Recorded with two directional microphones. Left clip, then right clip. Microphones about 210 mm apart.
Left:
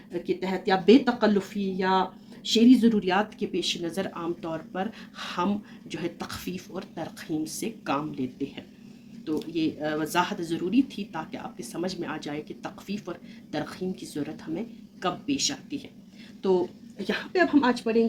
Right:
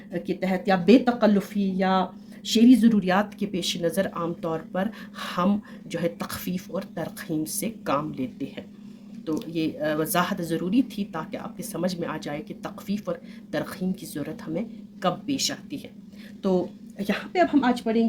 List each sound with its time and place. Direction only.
0.1 s speech: 55° right (ahead or behind)